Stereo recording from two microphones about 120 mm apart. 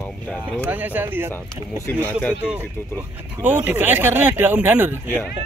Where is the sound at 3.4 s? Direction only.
15° right (ahead or behind).